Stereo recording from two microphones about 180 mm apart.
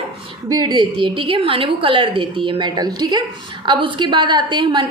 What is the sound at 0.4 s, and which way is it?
A woman's voice, 20° right (ahead or behind).